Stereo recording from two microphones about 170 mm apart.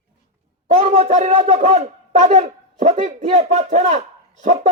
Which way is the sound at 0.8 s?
40° right (ahead or behind).